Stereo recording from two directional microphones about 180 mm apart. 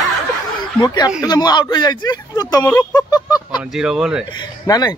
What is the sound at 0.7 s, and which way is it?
Speech, 20° left (ahead or behind).